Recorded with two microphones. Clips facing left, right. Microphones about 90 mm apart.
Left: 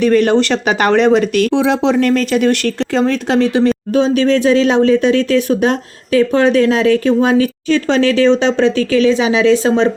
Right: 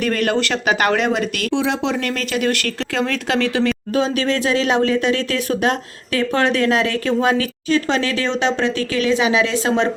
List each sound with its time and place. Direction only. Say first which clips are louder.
0.1 s speech: left 7 dB; 30° left (ahead or behind)